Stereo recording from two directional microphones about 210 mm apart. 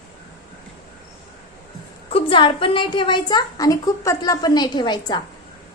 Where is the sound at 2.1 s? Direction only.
25° left (ahead or behind).